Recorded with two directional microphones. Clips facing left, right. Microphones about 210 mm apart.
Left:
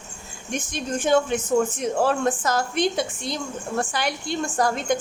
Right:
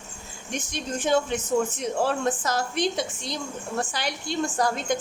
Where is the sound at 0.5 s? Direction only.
50° left (ahead or behind).